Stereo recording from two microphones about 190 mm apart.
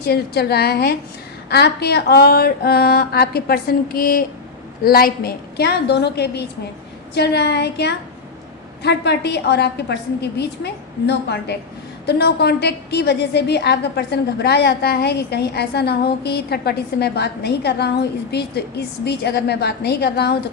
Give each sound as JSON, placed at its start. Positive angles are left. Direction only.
{"t": 0.0, "sound": "a woman's voice", "side_deg": 55}